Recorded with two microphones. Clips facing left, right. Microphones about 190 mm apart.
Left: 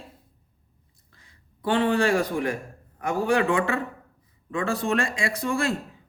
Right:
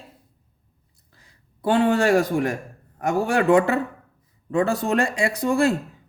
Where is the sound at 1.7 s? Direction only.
45° right (ahead or behind).